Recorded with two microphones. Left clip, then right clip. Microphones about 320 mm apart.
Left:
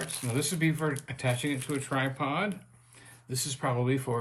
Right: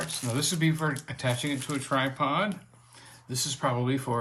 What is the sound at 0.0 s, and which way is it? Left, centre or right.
Speech, centre.